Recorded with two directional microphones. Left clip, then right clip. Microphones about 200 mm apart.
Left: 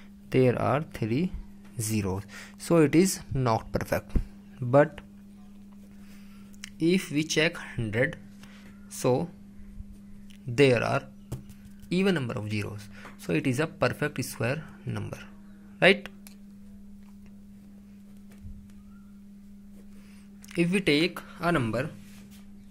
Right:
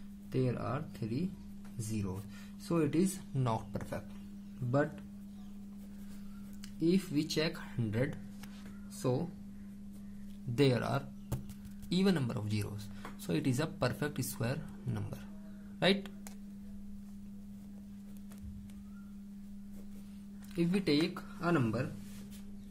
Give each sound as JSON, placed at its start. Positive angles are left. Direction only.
{"t": 0.3, "sound": "speech", "side_deg": 50}
{"t": 3.3, "sound": "speech", "side_deg": 30}
{"t": 6.6, "sound": "speech", "side_deg": 45}
{"t": 9.0, "sound": "speech", "side_deg": 45}
{"t": 10.5, "sound": "speech", "side_deg": 30}
{"t": 20.5, "sound": "speech", "side_deg": 35}